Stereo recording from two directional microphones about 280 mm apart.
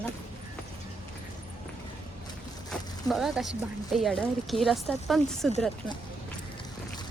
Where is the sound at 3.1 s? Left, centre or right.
Centre.